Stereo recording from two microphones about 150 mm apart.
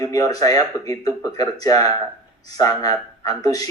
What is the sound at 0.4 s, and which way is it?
Speech, 25° left (ahead or behind).